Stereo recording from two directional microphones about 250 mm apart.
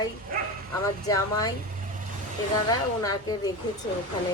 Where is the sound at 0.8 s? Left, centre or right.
Centre.